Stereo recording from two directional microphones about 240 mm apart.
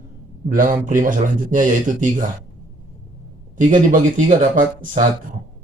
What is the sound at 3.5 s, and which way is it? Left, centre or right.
Speech, right.